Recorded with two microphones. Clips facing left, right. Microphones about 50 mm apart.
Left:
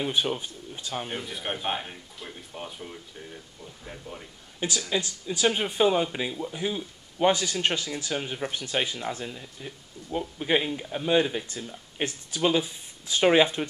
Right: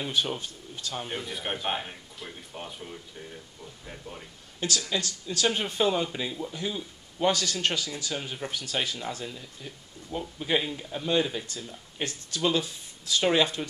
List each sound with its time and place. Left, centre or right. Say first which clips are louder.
0.0 s speech: left 2 dB; centre
1.0 s speech: left 1 dB; centre
4.6 s speech: left 1 dB; centre